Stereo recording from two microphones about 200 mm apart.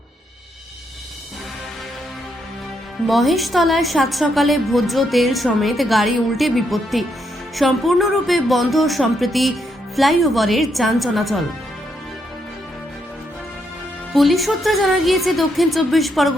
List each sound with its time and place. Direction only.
3.1 s a woman's voice: centre (ahead or behind)
14.1 s a woman's voice: centre (ahead or behind)